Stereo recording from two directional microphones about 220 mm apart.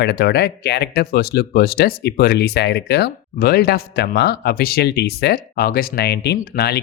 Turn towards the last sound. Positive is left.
turn(degrees=45)  # may be behind; listen again after turning